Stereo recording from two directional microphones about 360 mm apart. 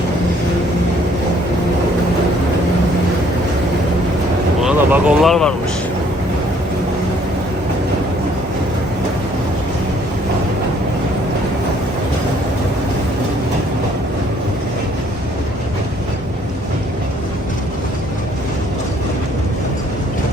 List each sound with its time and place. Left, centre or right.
4.6 s speech: centre